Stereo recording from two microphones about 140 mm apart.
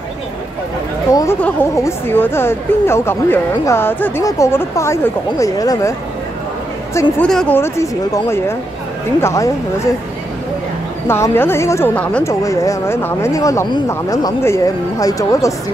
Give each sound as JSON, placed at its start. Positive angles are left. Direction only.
{"t": 1.1, "sound": "a woman's voice", "side_deg": 20}
{"t": 7.2, "sound": "a woman's voice", "side_deg": 5}
{"t": 7.5, "sound": "a woman's voice", "side_deg": 20}
{"t": 11.1, "sound": "a woman's voice", "side_deg": 20}
{"t": 12.3, "sound": "a woman's voice", "side_deg": 20}